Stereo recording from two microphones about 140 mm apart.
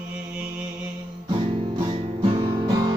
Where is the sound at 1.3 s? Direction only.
35° right (ahead or behind).